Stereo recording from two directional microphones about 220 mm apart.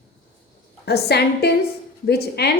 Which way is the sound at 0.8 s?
45° left (ahead or behind).